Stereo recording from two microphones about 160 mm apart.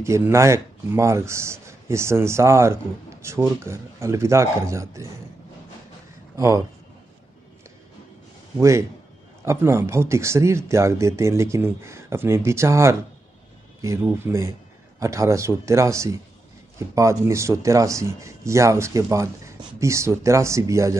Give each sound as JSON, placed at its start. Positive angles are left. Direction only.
{"t": 0.0, "sound": "speech", "side_deg": -15}
{"t": 6.3, "sound": "speech", "side_deg": -20}
{"t": 8.5, "sound": "speech", "side_deg": -20}